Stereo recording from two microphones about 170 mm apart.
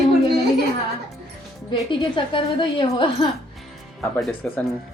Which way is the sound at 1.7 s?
30° left (ahead or behind).